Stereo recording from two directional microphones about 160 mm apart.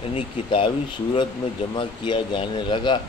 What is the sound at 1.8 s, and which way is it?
Speech, 30° left (ahead or behind).